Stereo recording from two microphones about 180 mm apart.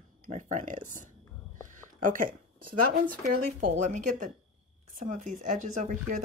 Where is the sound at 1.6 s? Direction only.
45° right (ahead or behind).